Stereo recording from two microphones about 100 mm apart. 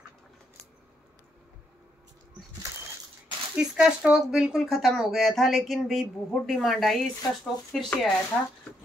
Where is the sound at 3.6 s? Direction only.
10° right (ahead or behind).